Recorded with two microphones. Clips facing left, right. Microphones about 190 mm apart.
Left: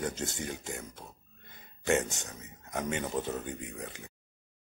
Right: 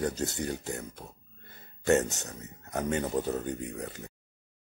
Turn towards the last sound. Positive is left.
turn(degrees=-40)  # may be behind; listen again after turning